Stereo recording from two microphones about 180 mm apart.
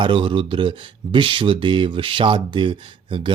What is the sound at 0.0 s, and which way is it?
Speech, 30° right (ahead or behind).